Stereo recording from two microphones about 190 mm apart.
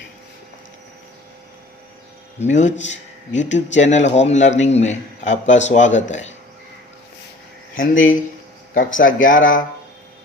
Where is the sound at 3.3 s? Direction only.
75° left (ahead or behind).